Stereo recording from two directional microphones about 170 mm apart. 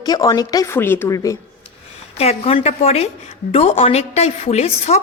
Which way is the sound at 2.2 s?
35° left (ahead or behind).